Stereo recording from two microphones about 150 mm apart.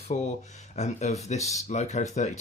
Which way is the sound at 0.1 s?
55° left (ahead or behind).